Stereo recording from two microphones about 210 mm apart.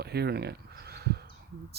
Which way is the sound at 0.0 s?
50° right (ahead or behind).